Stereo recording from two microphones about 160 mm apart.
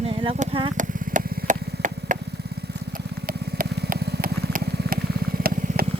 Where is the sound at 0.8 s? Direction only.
55° right (ahead or behind).